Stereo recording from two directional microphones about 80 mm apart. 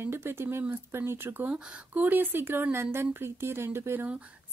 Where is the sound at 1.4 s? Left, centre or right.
Centre.